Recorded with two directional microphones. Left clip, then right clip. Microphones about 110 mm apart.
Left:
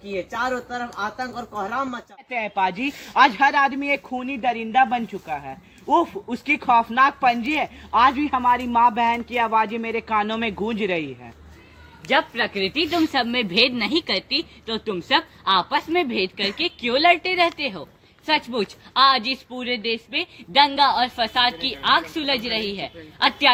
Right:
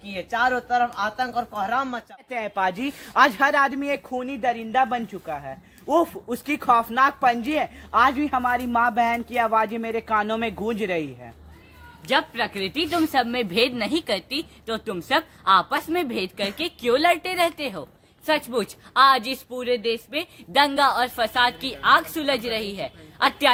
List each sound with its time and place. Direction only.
0.2 s speech: 20° right (ahead or behind)
2.3 s a woman's voice: 30° right (ahead or behind)